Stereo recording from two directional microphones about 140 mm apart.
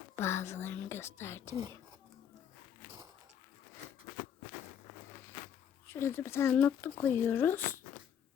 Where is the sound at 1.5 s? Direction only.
20° right (ahead or behind).